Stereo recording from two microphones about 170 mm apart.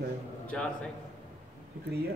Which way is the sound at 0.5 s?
5° left (ahead or behind).